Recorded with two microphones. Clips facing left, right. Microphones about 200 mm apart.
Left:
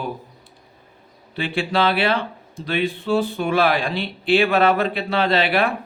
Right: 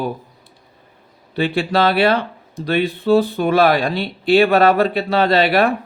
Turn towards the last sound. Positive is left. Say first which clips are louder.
# right 4 dB
turn(degrees=-40)  # may be behind; listen again after turning